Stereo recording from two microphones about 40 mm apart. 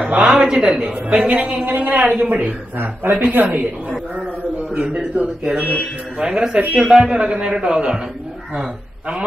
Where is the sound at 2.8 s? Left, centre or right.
Right.